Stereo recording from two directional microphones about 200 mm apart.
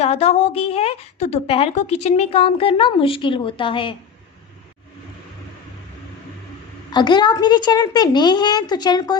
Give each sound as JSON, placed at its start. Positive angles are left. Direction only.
{"t": 0.0, "sound": "a woman's voice", "side_deg": 30}
{"t": 6.9, "sound": "a woman's voice", "side_deg": 20}